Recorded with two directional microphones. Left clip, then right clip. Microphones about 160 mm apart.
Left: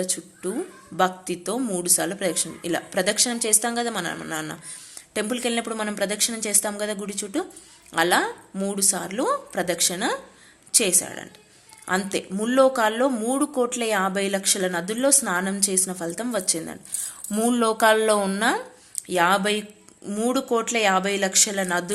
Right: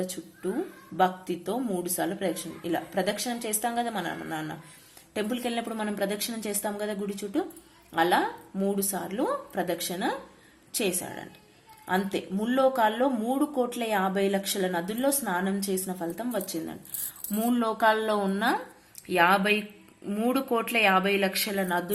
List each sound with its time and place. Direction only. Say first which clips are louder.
0.0 s speech: left 4 dB; 10° left (ahead or behind)